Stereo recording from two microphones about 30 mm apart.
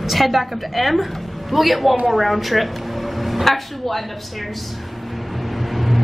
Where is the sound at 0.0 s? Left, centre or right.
Centre.